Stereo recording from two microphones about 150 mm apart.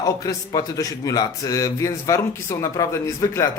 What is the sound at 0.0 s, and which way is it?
A man's voice, 25° left (ahead or behind).